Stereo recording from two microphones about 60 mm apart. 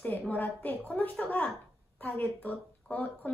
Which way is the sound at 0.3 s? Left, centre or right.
Left.